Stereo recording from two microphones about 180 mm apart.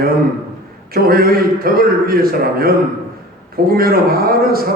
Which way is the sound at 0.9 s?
55° right (ahead or behind).